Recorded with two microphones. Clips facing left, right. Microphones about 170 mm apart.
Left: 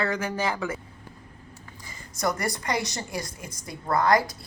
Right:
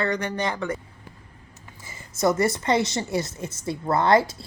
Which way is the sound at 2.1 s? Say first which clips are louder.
Right 6 dB; 25° right (ahead or behind).